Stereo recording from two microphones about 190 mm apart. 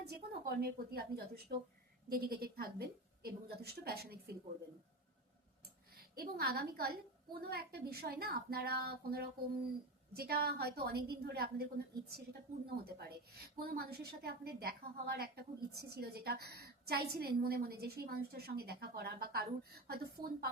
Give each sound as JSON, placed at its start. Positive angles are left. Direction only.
{"t": 0.1, "sound": "a woman's voice", "side_deg": -55}
{"t": 6.1, "sound": "a woman's voice", "side_deg": -55}